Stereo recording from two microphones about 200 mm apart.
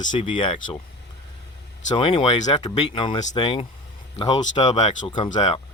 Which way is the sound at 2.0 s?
25° left (ahead or behind).